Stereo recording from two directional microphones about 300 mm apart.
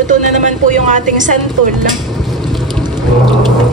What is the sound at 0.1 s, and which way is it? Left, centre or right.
A woman's voice, right.